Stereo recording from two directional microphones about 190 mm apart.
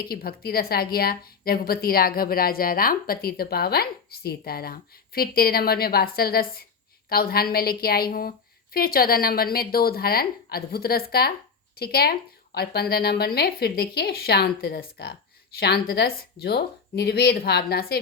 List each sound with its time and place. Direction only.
0.0 s a woman's voice: 55° left (ahead or behind)